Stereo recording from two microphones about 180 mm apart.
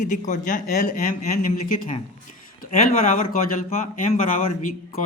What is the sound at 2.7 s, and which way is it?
Speech, 40° left (ahead or behind).